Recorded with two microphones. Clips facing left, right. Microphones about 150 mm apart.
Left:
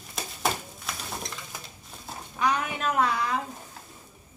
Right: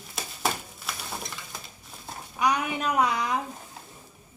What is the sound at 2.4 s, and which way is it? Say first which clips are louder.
A woman's voice: right 1 dB; 15° right (ahead or behind).